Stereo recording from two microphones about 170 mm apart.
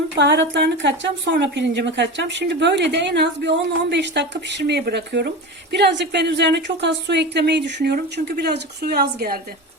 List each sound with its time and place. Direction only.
0.2 s a woman's voice: 90° right; by 5.3 s 75° right (ahead or behind)
5.7 s a woman's voice: 85° right
8.1 s speech: 70° right (ahead or behind)